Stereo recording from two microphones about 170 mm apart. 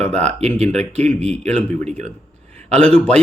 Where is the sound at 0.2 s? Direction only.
40° right (ahead or behind).